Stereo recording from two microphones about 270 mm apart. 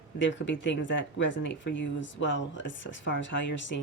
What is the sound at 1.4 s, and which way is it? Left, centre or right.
Speech, left.